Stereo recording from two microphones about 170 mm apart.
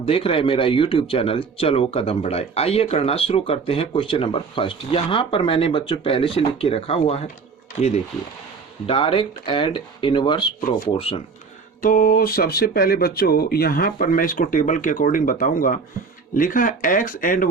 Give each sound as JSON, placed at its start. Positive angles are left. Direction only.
{"t": 0.0, "sound": "speech", "side_deg": 35}
{"t": 8.9, "sound": "speech", "side_deg": 30}
{"t": 11.8, "sound": "speech", "side_deg": 55}